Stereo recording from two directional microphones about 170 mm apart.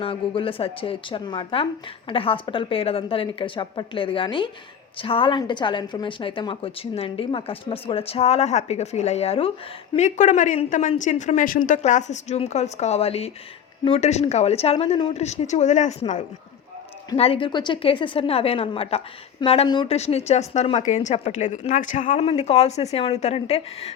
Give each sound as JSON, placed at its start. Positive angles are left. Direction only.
{"t": 0.0, "sound": "a woman's voice", "side_deg": 30}
{"t": 15.1, "sound": "a woman's voice", "side_deg": 40}